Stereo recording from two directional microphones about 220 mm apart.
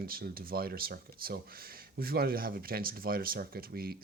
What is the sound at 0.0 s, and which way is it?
Speech, 45° right (ahead or behind).